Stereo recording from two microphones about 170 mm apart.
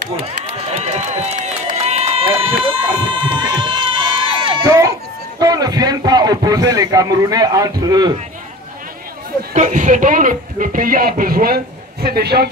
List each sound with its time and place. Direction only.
0.2 s run: 35° right (ahead or behind)
4.6 s a sound: 20° right (ahead or behind)
5.4 s a man's voice: 25° right (ahead or behind)
9.5 s speech: 45° right (ahead or behind); by 12.4 s 70° right (ahead or behind)